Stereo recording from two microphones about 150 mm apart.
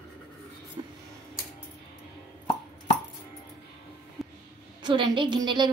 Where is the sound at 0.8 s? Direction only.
25° right (ahead or behind).